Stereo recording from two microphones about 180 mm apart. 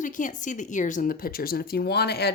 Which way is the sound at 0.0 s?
45° left (ahead or behind).